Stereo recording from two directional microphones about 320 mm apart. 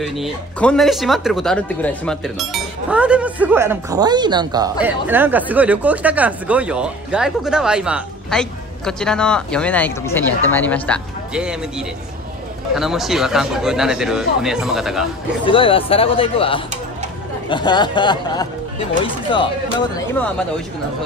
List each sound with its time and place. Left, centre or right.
0.0 s speech: centre
12.7 s speech: centre
15.4 s speech: centre